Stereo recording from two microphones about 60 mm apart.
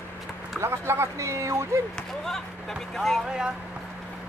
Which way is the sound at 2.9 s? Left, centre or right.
Centre.